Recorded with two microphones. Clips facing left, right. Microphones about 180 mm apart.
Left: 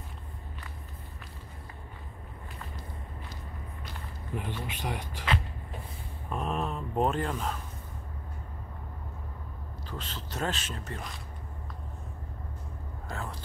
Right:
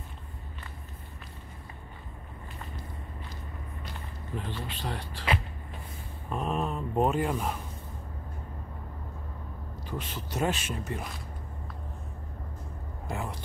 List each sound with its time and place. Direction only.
4.4 s speech: 15° left (ahead or behind)
6.3 s speech: centre (ahead or behind)
9.8 s speech: 15° right (ahead or behind)
13.1 s speech: 15° right (ahead or behind)